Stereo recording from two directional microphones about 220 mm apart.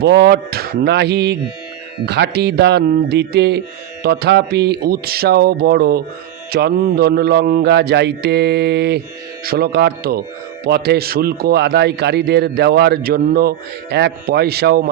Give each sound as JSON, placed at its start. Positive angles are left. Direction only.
{"t": 0.0, "sound": "a man's voice", "side_deg": -50}